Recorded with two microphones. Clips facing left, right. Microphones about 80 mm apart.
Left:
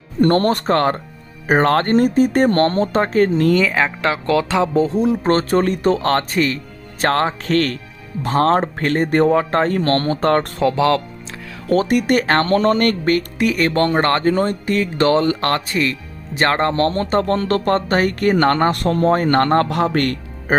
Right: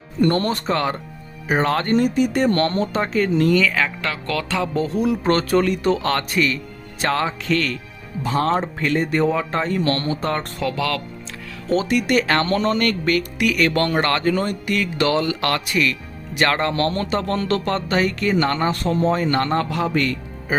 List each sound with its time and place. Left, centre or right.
0.2 s speech: left
3.6 s speech: left
10.6 s speech: left
11.7 s speech: left